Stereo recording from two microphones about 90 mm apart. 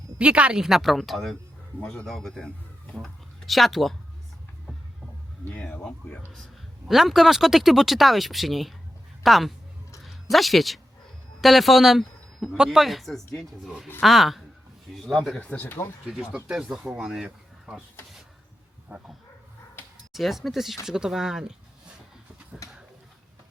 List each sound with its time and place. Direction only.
0.2 s speech: 15° right (ahead or behind)
1.8 s speech: 10° left (ahead or behind)
5.5 s speech: 15° left (ahead or behind)
6.8 s speech: 5° right (ahead or behind)
10.0 s a sound: centre (ahead or behind)
11.3 s speech: centre (ahead or behind)
15.4 s speech: 15° left (ahead or behind)
15.6 s speech: 25° left (ahead or behind)
16.0 s speech: 5° right (ahead or behind)
18.9 s speech: 15° right (ahead or behind)
20.1 s speech: centre (ahead or behind)
22.6 s a sound: 40° left (ahead or behind)